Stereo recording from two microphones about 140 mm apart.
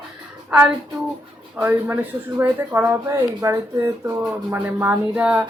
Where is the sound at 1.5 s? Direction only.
15° right (ahead or behind).